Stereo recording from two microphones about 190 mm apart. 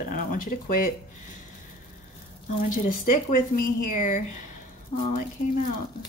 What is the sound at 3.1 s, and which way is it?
Speech, 45° left (ahead or behind).